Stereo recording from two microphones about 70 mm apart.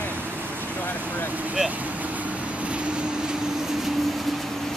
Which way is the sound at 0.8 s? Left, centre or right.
Left.